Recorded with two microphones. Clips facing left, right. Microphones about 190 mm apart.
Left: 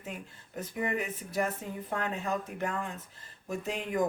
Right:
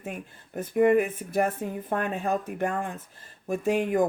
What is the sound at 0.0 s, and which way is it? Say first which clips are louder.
Speech: right 5 dB; 55° right (ahead or behind).